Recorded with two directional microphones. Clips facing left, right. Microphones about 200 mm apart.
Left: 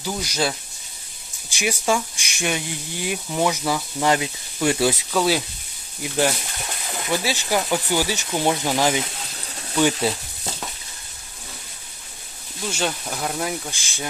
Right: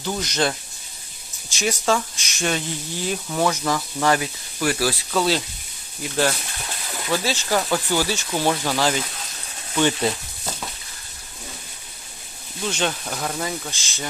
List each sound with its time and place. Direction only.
0.0 s speech: 10° left (ahead or behind)
4.1 s speech: 20° left (ahead or behind)
5.1 s speech: 10° left (ahead or behind)
12.7 s speech: 5° left (ahead or behind)